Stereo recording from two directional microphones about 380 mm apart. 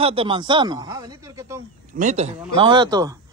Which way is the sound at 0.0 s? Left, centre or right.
Centre.